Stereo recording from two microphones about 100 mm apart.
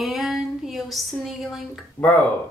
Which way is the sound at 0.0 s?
Centre (ahead or behind).